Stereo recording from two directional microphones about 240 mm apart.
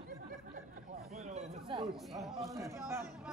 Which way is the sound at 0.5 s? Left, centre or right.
Right.